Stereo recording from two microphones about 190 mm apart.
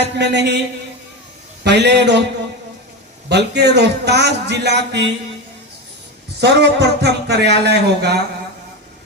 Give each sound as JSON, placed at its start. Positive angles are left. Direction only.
{"t": 0.2, "sound": "a man's voice", "side_deg": -65}
{"t": 1.6, "sound": "a man's voice", "side_deg": -65}
{"t": 3.2, "sound": "a man's voice", "side_deg": -60}
{"t": 6.4, "sound": "a man's voice", "side_deg": -60}